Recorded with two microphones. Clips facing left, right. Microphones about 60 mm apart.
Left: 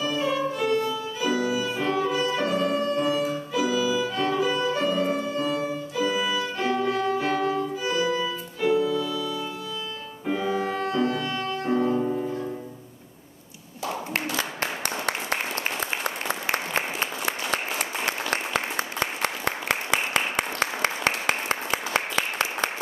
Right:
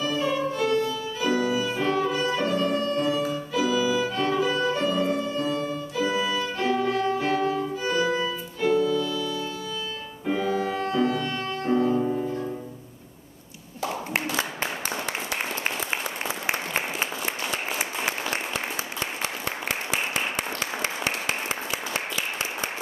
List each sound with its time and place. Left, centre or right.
0.0 s music: centre
4.1 s violin: centre
8.2 s music: centre
11.6 s music: centre
14.6 s a sound: left
17.3 s applause: left